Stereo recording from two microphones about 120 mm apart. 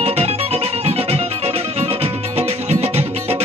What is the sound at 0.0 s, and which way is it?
Music, 60° right (ahead or behind).